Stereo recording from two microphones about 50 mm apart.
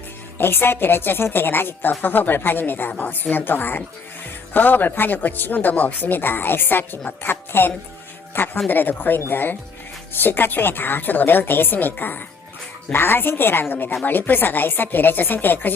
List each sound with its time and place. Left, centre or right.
0.3 s a woman's voice: left